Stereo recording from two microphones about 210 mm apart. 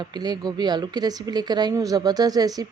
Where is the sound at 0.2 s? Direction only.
20° right (ahead or behind).